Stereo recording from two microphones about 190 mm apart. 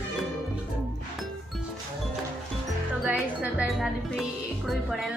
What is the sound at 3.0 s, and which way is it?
Speech, 5° right (ahead or behind).